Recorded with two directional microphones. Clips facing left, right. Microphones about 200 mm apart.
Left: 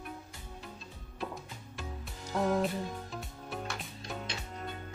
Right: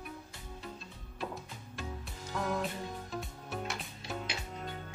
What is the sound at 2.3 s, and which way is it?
Music, 35° left (ahead or behind).